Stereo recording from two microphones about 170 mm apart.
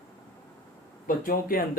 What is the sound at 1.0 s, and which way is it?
Speech, 55° left (ahead or behind).